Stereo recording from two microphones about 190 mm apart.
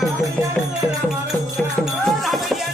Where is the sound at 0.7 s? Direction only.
Centre (ahead or behind).